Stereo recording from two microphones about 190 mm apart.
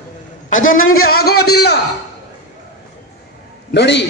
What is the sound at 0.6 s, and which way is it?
Speech, 90° left.